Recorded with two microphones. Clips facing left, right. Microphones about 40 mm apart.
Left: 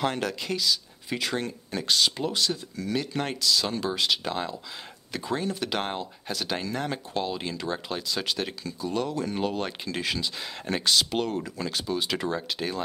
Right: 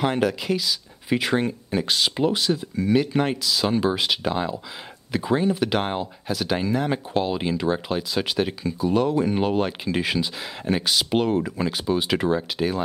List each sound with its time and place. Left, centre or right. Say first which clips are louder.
0.0 s speech: right 6 dB; centre